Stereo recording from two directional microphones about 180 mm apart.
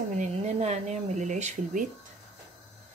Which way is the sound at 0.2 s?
35° right (ahead or behind).